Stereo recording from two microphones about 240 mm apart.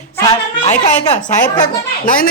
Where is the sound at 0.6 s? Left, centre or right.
Left.